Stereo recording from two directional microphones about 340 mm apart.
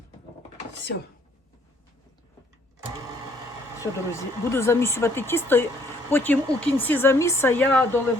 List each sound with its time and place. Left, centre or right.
3.8 s a woman's voice: centre